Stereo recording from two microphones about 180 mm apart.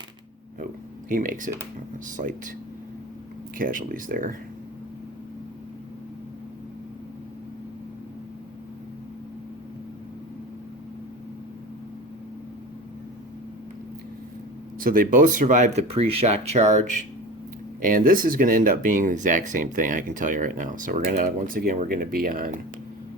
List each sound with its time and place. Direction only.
1.1 s speech: 50° right (ahead or behind)
3.6 s speech: 50° right (ahead or behind)
14.8 s speech: 50° right (ahead or behind)